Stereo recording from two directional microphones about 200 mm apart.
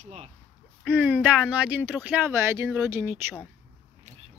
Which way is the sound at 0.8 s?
5° right (ahead or behind).